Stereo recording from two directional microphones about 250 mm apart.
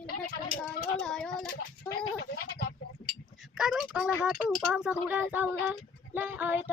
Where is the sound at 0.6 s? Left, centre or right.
Centre.